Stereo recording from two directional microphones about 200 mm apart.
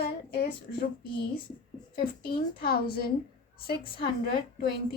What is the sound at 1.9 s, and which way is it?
A woman's voice, 50° left (ahead or behind).